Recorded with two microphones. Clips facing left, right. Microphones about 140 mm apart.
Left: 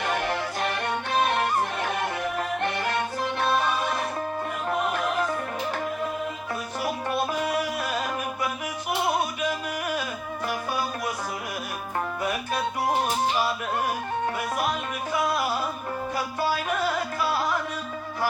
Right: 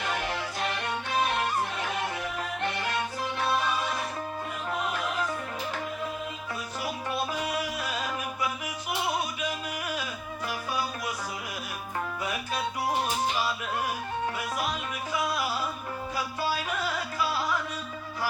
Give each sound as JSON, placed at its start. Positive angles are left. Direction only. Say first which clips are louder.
{"t": 0.0, "sound": "music", "louder": "left 4 dB", "side_deg": 55}